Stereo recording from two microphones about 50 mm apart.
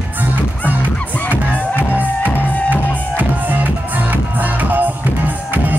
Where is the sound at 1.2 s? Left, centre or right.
Left.